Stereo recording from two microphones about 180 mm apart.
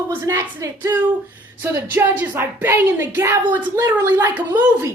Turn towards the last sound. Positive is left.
turn(degrees=-10)  # may be behind; listen again after turning